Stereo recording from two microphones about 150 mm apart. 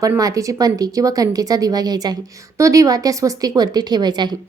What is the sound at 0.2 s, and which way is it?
Speech, 20° right (ahead or behind).